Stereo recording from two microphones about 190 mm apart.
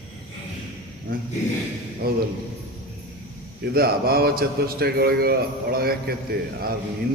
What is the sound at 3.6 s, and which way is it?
A man's voice, 55° right (ahead or behind).